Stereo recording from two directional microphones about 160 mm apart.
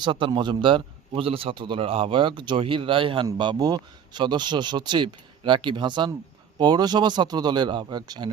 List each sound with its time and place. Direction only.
0.0 s a man's voice: 30° right (ahead or behind)